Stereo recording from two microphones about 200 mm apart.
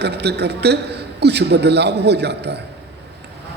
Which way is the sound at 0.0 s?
55° right (ahead or behind).